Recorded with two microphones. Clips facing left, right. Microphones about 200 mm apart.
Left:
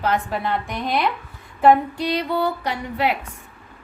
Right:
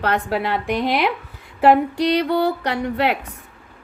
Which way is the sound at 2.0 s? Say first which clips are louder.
Right 4 dB; 65° right (ahead or behind).